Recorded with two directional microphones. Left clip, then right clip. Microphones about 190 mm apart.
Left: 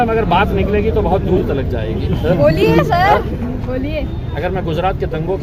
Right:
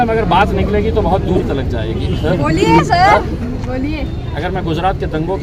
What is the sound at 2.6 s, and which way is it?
Speech, 30° left (ahead or behind).